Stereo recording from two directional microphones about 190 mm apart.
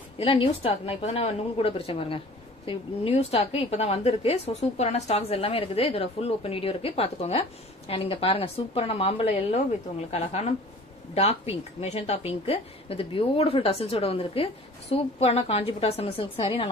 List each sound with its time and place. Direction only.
0.2 s a woman's voice: 30° left (ahead or behind)